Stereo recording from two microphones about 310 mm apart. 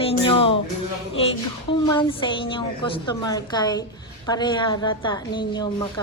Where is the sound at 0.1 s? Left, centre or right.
Centre.